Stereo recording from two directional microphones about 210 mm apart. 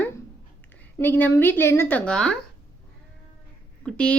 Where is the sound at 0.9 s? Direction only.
10° left (ahead or behind).